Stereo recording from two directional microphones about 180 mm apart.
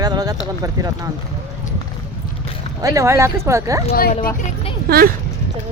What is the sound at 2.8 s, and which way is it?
Speech, 20° right (ahead or behind).